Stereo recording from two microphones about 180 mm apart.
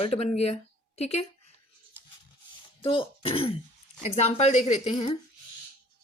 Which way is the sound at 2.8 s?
30° left (ahead or behind).